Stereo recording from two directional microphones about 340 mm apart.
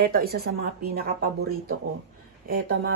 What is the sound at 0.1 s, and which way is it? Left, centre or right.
Speech, right.